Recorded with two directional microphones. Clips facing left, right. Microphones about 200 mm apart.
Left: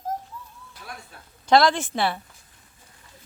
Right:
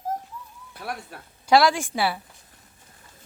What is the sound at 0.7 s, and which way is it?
Speech, 65° right (ahead or behind).